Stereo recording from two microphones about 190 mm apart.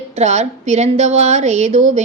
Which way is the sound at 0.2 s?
35° right (ahead or behind).